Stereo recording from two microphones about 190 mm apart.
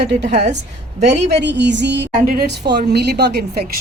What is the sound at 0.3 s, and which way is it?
Speech, 35° right (ahead or behind).